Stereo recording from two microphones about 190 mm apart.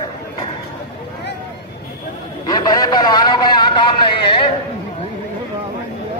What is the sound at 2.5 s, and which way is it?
Speech, 20° left (ahead or behind).